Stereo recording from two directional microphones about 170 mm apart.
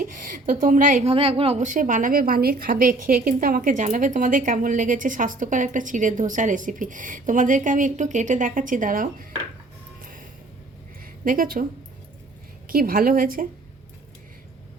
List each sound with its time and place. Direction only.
0.0 s speech: 50° right (ahead or behind)
1.0 s a woman's voice: 35° right (ahead or behind); by 9.2 s 55° right (ahead or behind)
10.0 s a sound: 55° right (ahead or behind)
12.6 s a woman's voice: 60° right (ahead or behind)